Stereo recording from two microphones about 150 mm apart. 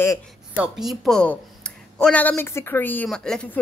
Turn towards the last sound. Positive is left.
turn(degrees=5)  # may be behind; listen again after turning